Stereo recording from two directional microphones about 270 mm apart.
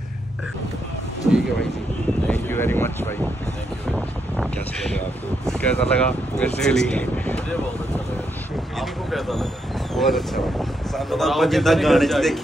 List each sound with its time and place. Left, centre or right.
2.2 s speech: centre
8.7 s speech: centre